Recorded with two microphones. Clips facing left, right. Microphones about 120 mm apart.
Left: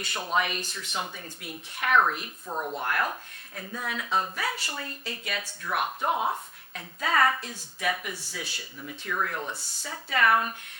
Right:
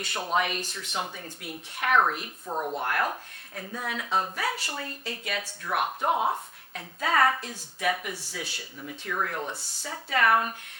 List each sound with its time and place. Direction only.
0.0 s speech: 55° right (ahead or behind)
1.0 s speech: 40° right (ahead or behind)
2.5 s a woman's voice: 25° right (ahead or behind)
2.8 s speech: 45° right (ahead or behind)
8.4 s speech: 55° right (ahead or behind)
8.8 s speech: 35° right (ahead or behind)
9.8 s speech: 45° right (ahead or behind)